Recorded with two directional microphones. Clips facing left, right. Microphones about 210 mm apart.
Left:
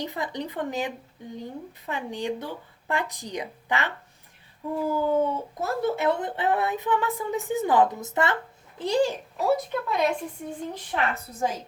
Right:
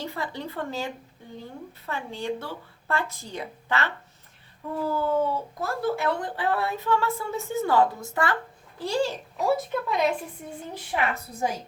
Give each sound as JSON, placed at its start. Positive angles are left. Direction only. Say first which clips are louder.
{"t": 0.0, "sound": "speech", "louder": "left 2 dB", "side_deg": 15}
{"t": 9.4, "sound": "speech", "louder": "even", "side_deg": 0}
{"t": 10.9, "sound": "a woman's voice", "louder": "right 1 dB", "side_deg": -10}